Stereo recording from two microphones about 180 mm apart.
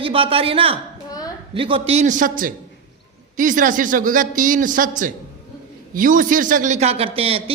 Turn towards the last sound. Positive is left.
turn(degrees=-35)  # may be behind; listen again after turning